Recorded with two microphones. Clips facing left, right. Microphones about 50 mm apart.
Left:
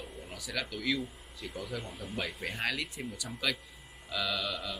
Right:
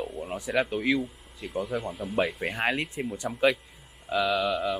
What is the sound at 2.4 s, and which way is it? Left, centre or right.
Speech, right.